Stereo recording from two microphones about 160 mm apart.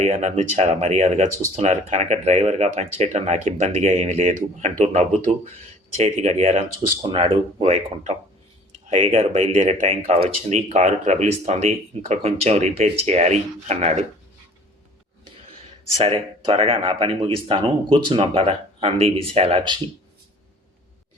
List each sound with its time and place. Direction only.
0.0 s speech: 45° right (ahead or behind)
16.0 s speech: 40° right (ahead or behind)